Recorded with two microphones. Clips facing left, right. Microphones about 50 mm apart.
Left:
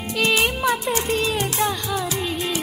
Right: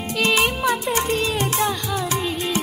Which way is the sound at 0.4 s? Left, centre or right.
Centre.